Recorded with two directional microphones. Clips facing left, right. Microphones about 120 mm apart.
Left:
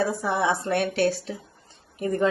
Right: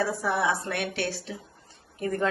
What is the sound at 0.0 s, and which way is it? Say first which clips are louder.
A woman's voice: left 2 dB; 20° left (ahead or behind).